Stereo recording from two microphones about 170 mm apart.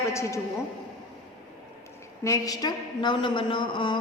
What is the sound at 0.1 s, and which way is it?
Speech, 15° left (ahead or behind).